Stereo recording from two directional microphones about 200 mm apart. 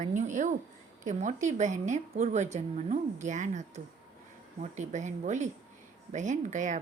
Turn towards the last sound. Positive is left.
turn(degrees=-40)  # may be behind; listen again after turning